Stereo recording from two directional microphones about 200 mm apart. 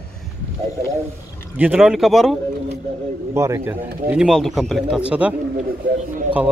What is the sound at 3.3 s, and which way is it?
Speech, 15° right (ahead or behind).